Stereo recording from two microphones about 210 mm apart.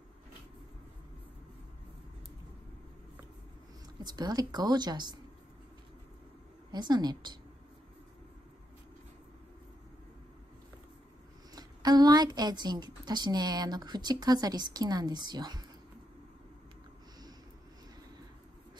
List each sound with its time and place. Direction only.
4.0 s a woman's voice: 20° right (ahead or behind)
6.7 s a woman's voice: 20° right (ahead or behind)
11.5 s a woman's voice: 20° right (ahead or behind)